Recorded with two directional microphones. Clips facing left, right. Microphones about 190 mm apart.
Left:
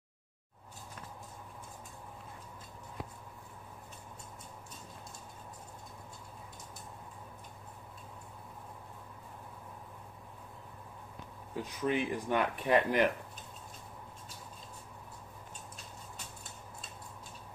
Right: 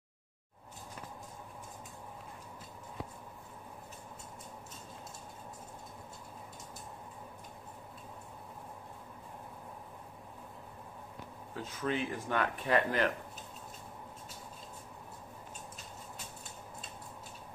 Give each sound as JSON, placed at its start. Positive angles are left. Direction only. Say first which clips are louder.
{"t": 11.5, "sound": "speech", "louder": "left 3 dB", "side_deg": 15}